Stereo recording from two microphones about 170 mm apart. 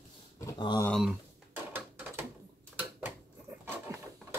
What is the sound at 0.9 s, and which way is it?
Speech, centre (ahead or behind).